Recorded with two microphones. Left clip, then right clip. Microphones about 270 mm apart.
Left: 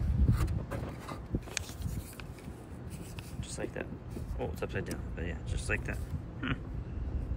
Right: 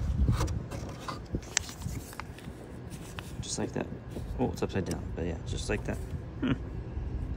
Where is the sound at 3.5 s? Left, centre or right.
Centre.